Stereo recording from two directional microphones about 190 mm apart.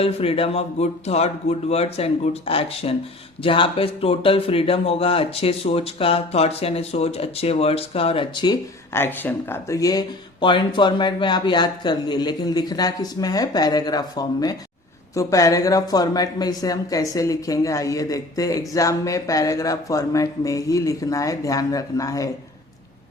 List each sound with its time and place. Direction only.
0.0 s speech: 30° left (ahead or behind)
8.9 s speech: 10° left (ahead or behind)